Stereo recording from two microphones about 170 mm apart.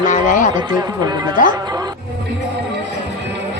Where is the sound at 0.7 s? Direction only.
20° right (ahead or behind).